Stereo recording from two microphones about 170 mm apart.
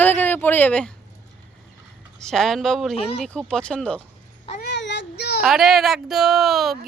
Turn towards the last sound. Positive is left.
turn(degrees=0)  # may be behind; listen again after turning